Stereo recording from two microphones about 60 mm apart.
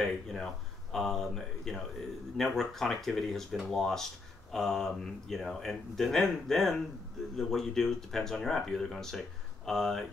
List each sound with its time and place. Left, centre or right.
0.0 s speech: centre